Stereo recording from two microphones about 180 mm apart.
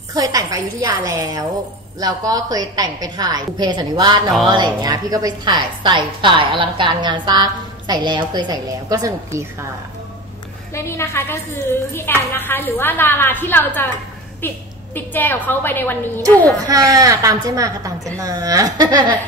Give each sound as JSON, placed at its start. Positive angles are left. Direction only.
{"t": 0.1, "sound": "a woman's voice", "side_deg": -20}
{"t": 10.7, "sound": "a woman's voice", "side_deg": 15}
{"t": 16.6, "sound": "a woman's voice", "side_deg": -20}